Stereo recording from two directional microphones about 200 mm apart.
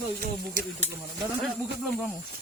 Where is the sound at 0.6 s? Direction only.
45° right (ahead or behind).